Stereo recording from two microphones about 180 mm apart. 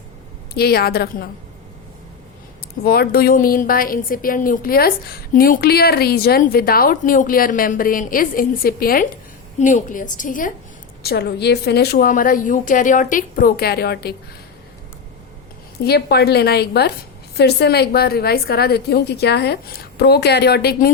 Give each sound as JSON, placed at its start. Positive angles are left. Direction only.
{"t": 0.5, "sound": "a woman's voice", "side_deg": 60}
{"t": 2.8, "sound": "a woman's voice", "side_deg": 60}
{"t": 9.6, "sound": "a woman's voice", "side_deg": 45}
{"t": 11.0, "sound": "a woman's voice", "side_deg": 60}
{"t": 15.8, "sound": "a woman's voice", "side_deg": 65}